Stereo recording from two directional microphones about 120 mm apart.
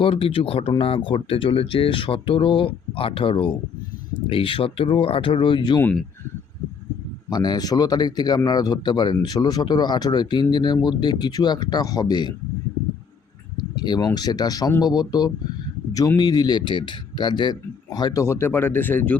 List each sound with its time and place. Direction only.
0.0 s speech: 50° left (ahead or behind)
7.3 s speech: 35° left (ahead or behind)
13.7 s speech: 35° left (ahead or behind); by 19.1 s 15° left (ahead or behind)